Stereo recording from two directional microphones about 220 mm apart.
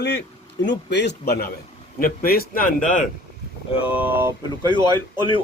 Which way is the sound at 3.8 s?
5° right (ahead or behind).